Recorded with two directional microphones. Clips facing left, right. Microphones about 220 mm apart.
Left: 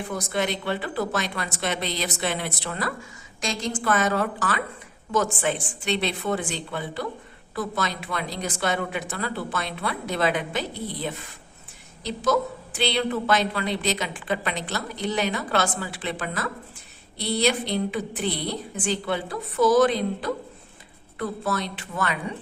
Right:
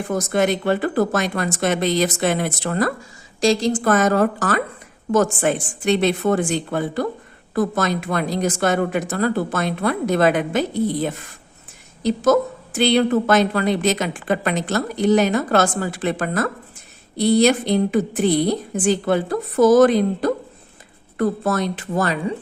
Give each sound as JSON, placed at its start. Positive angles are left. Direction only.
{"t": 0.1, "sound": "a woman's voice", "side_deg": -45}
{"t": 3.4, "sound": "a woman's voice", "side_deg": -35}